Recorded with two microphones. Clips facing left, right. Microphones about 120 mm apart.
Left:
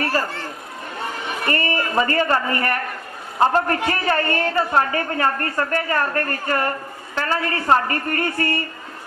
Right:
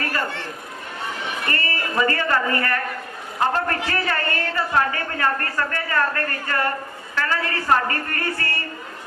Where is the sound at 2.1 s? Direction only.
25° left (ahead or behind).